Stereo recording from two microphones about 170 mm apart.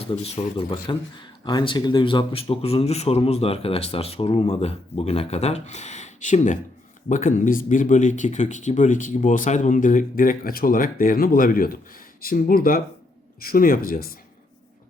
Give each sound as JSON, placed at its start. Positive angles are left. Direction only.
{"t": 0.0, "sound": "a man's voice", "side_deg": 35}